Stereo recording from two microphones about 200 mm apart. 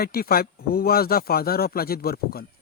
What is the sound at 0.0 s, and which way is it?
Speech, 50° left (ahead or behind).